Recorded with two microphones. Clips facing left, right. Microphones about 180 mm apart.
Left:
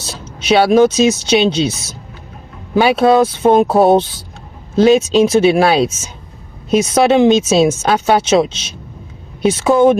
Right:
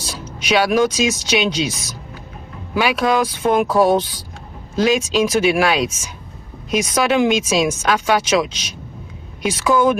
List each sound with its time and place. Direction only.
0.4 s speech: 30° left (ahead or behind)
2.7 s speech: 30° left (ahead or behind)